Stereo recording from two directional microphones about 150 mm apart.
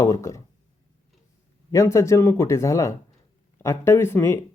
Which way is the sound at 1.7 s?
20° left (ahead or behind).